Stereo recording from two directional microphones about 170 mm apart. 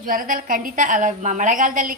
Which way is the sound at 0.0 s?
55° right (ahead or behind).